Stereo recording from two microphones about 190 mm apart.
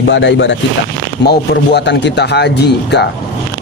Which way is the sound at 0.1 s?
70° left (ahead or behind).